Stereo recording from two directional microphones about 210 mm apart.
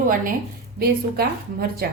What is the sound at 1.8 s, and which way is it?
Speech, 45° right (ahead or behind).